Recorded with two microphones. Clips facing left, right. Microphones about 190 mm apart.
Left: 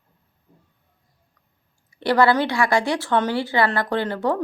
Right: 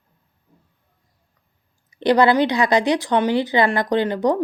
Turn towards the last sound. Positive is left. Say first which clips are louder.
# right 4 dB
turn(degrees=-15)  # may be behind; listen again after turning